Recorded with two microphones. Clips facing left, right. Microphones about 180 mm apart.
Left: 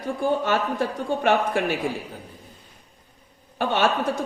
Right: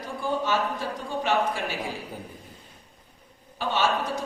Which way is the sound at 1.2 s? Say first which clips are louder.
Left 4 dB; 55° left (ahead or behind).